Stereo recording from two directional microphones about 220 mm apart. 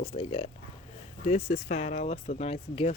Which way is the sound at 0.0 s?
25° left (ahead or behind).